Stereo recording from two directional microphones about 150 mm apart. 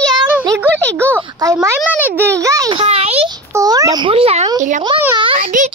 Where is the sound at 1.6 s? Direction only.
15° right (ahead or behind).